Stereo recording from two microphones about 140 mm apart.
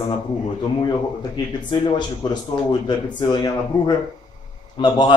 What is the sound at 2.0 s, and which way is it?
Speech, 30° left (ahead or behind).